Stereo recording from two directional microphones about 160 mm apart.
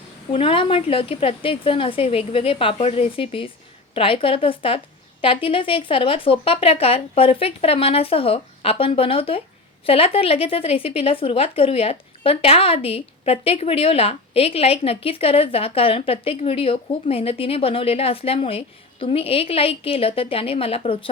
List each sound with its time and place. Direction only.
0.3 s a woman's voice: 35° left (ahead or behind)